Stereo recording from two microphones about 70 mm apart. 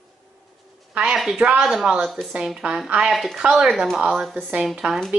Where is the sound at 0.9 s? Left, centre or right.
Centre.